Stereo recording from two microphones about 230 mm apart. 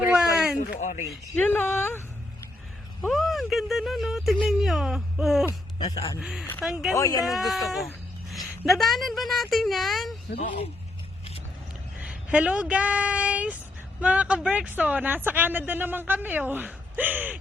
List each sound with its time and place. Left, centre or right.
0.0 s a sound: centre
0.7 s speech: left
1.4 s speech: centre
5.5 s speech: centre
6.1 s speech: centre
6.4 s speech: centre
6.7 s speech: centre
6.9 s speech: centre
7.3 s speech: centre
7.7 s a sound: centre
8.6 s speech: centre
12.0 s speech: centre